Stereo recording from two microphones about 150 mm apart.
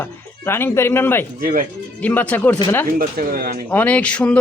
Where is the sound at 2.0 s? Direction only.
10° left (ahead or behind).